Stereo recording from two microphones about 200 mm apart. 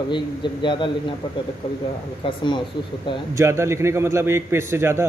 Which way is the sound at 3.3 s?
15° right (ahead or behind).